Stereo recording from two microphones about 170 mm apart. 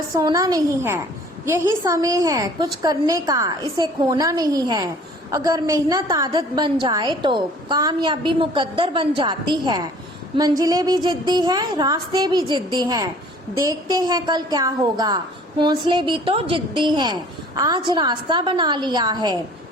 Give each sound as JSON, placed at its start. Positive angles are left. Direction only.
{"t": 0.1, "sound": "a woman's voice", "side_deg": -20}